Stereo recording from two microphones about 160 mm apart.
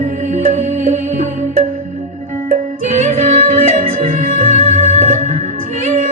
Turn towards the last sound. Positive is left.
turn(degrees=-45)  # may be behind; listen again after turning